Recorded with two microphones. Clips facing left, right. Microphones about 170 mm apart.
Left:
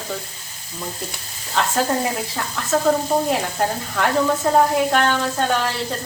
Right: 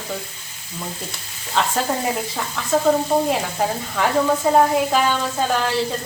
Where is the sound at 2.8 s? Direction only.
Centre (ahead or behind).